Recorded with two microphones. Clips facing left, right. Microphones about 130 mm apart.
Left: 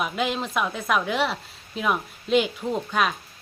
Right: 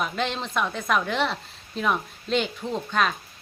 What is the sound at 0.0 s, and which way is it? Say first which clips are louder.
A woman's voice: left 2 dB; 5° left (ahead or behind).